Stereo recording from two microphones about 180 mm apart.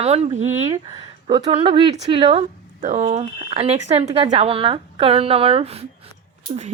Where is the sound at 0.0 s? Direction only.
35° right (ahead or behind).